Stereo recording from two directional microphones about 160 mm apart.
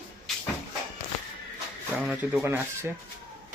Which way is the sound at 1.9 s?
5° right (ahead or behind).